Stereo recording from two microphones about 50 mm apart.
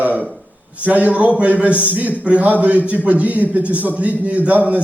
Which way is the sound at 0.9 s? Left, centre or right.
Right.